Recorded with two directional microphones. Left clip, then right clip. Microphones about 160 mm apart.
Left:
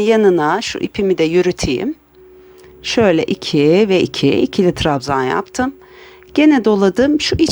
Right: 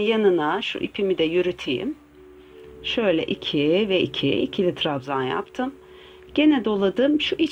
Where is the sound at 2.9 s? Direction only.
45° left (ahead or behind).